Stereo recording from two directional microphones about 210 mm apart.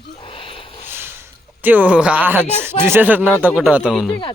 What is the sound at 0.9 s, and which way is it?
Speech, 10° right (ahead or behind).